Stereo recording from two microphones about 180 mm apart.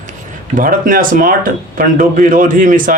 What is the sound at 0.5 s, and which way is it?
A man's voice, 50° right (ahead or behind).